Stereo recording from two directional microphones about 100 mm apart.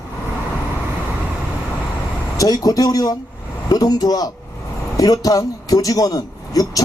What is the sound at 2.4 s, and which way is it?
Speech, 40° left (ahead or behind).